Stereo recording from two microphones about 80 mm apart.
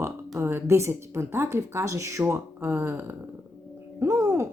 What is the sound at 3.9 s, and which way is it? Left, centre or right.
Speech, right.